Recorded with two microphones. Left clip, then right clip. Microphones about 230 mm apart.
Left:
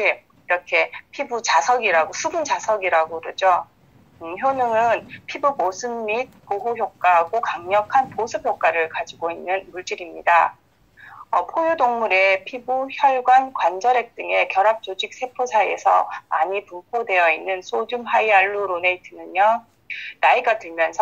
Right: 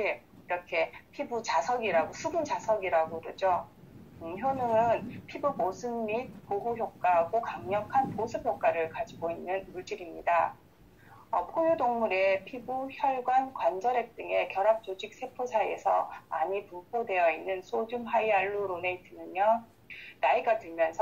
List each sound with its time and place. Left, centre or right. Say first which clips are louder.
0.0 s speech: left 11 dB; left